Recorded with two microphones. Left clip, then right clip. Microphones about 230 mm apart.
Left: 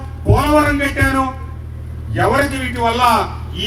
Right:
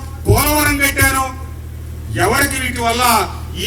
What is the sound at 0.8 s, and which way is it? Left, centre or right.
A man's voice, right.